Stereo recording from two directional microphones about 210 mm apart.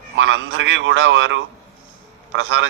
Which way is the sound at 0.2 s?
65° right (ahead or behind).